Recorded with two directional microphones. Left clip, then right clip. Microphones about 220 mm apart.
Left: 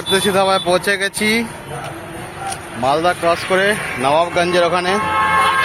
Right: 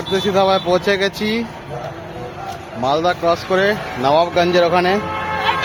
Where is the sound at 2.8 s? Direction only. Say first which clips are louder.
Left 1 dB; 5° right (ahead or behind).